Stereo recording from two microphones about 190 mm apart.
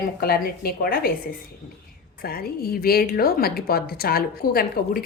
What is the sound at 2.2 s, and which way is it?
A woman's voice, 55° left (ahead or behind).